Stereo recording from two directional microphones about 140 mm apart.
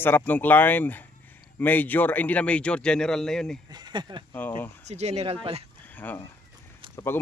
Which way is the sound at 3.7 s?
30° right (ahead or behind).